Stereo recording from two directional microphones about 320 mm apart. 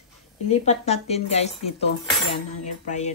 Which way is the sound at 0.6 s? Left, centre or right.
Centre.